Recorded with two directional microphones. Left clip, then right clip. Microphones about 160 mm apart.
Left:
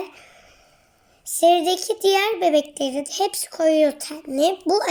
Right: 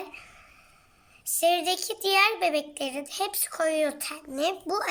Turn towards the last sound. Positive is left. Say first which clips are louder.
# left 8 dB
turn(degrees=40)  # may be behind; listen again after turning